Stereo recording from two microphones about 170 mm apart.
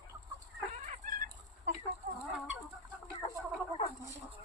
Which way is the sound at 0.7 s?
45° right (ahead or behind).